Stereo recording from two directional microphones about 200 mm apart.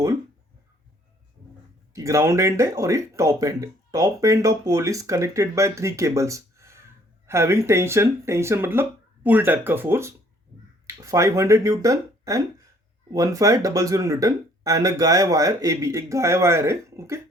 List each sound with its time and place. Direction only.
1.9 s speech: 15° right (ahead or behind)